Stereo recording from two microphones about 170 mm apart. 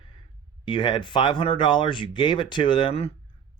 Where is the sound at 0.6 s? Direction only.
25° left (ahead or behind).